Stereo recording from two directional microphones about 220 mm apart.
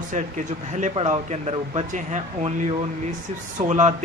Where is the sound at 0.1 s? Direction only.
35° right (ahead or behind).